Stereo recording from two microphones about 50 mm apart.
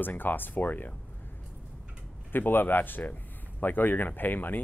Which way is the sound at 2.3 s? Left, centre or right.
Left.